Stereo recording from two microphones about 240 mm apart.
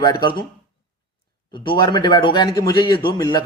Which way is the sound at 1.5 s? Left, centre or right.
Centre.